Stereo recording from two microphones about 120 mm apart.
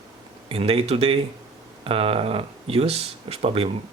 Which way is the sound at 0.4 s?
55° right (ahead or behind).